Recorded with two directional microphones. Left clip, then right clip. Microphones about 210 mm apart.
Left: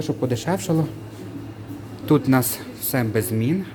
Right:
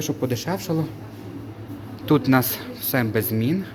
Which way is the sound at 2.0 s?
5° left (ahead or behind).